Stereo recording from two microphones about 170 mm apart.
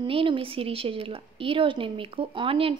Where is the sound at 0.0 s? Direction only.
30° right (ahead or behind).